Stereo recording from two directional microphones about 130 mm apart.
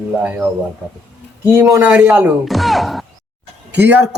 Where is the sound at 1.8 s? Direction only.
10° right (ahead or behind).